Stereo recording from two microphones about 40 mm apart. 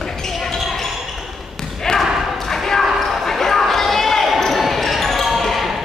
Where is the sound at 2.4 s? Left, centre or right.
Centre.